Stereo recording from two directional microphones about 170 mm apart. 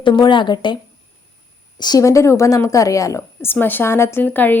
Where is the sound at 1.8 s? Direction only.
20° left (ahead or behind).